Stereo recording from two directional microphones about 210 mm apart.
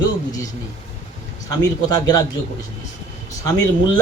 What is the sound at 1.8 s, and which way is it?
Speech, 20° left (ahead or behind).